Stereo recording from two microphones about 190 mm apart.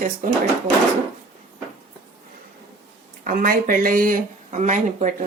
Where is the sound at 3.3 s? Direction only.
45° right (ahead or behind).